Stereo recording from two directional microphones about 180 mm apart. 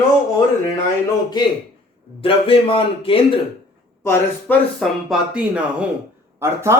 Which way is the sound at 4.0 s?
10° left (ahead or behind).